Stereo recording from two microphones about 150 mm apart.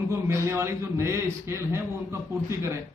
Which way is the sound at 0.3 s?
15° right (ahead or behind).